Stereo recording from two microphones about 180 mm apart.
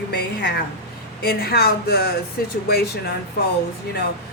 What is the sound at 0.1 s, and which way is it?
A woman's voice, 60° left (ahead or behind).